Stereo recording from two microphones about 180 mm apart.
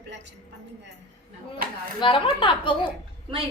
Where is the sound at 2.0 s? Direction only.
25° left (ahead or behind).